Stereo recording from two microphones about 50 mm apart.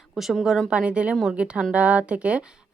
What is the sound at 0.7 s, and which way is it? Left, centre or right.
Speech, right.